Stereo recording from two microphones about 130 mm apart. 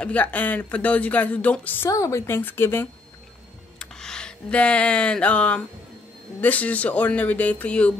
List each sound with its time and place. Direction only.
0.0 s speech: 10° left (ahead or behind)
1.9 s a woman's voice: 25° left (ahead or behind)
3.8 s a sound: 5° left (ahead or behind)
6.4 s speech: 10° left (ahead or behind)